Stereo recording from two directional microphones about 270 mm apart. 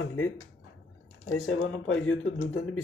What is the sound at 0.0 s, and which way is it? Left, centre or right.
Speech, left.